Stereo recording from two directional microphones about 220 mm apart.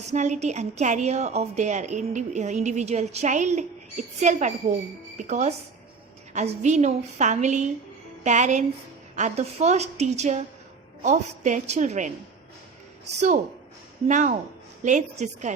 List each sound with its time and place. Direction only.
0.0 s a woman's voice: 30° right (ahead or behind)
14.1 s a woman's voice: 35° right (ahead or behind)